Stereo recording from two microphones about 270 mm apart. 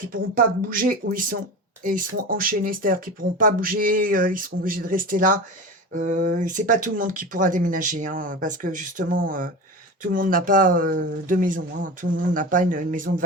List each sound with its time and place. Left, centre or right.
0.3 s speech: right